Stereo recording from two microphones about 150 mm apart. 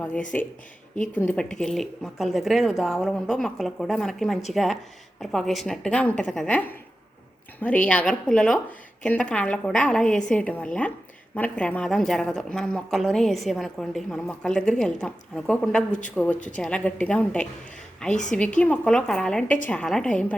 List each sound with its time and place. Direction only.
0.0 s a woman's voice: 10° left (ahead or behind)
15.9 s speech: 55° left (ahead or behind)
16.6 s a woman's voice: 10° left (ahead or behind)